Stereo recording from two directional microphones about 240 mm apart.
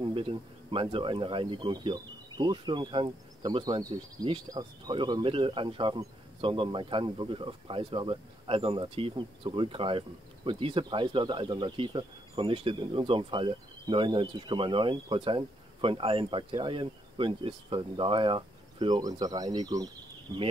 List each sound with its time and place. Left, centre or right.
0.0 s speech: right